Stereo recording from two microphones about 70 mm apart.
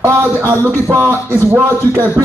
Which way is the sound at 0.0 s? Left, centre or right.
Right.